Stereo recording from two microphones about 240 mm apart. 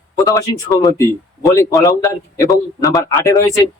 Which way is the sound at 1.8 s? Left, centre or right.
Centre.